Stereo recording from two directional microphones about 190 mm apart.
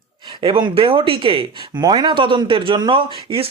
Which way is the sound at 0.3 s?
25° right (ahead or behind).